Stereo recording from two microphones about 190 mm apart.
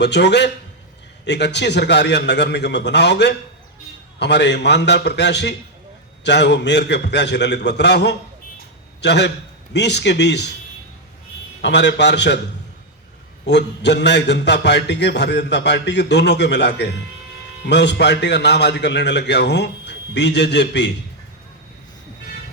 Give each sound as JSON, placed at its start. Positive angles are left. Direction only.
{"t": 0.0, "sound": "a man's voice", "side_deg": 65}
{"t": 11.6, "sound": "a man's voice", "side_deg": 65}
{"t": 13.4, "sound": "a man's voice", "side_deg": 65}